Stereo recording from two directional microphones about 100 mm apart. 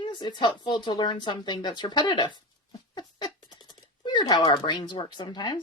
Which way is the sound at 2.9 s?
45° left (ahead or behind).